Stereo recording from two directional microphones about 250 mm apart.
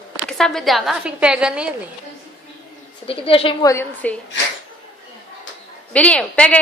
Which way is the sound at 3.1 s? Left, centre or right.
Left.